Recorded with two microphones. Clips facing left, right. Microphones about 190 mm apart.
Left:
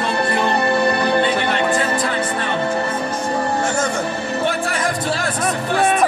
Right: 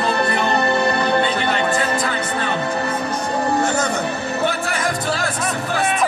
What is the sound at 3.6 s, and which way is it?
Music, 30° left (ahead or behind).